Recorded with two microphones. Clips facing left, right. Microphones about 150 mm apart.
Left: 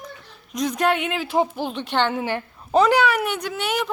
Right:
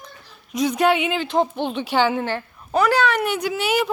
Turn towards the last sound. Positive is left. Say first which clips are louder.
# right 4 dB
turn(degrees=-5)  # may be behind; listen again after turning